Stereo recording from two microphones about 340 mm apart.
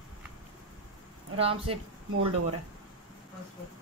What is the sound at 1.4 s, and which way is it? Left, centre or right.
Speech, centre.